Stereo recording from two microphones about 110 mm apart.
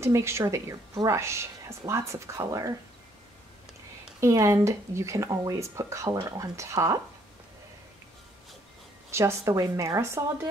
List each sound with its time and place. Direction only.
0.0 s speech: 25° right (ahead or behind)
4.2 s speech: 30° right (ahead or behind)
9.1 s speech: 25° right (ahead or behind)